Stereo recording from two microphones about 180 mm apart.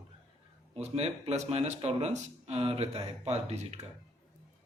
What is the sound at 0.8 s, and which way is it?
Speech, 35° right (ahead or behind).